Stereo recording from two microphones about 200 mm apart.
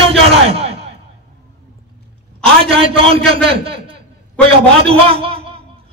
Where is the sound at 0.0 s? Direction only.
30° right (ahead or behind).